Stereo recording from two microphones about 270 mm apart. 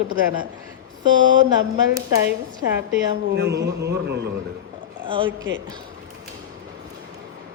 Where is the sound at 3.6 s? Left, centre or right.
Right.